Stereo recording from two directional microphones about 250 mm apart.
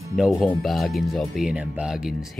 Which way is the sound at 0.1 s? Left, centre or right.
Centre.